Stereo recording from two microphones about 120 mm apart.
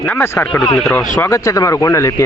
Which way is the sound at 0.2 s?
20° left (ahead or behind).